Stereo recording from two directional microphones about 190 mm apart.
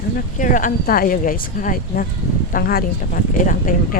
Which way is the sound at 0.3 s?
45° left (ahead or behind).